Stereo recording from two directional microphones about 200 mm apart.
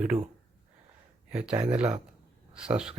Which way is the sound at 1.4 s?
5° right (ahead or behind).